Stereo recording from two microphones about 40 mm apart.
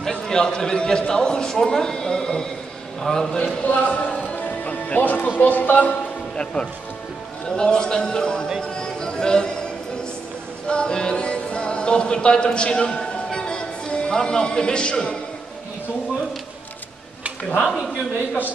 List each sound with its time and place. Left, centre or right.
0.0 s a man's voice: centre
3.6 s speech: left
4.1 s music: left
5.4 s speech: left
6.3 s a man's voice: left
8.6 s music: centre
10.7 s speech: left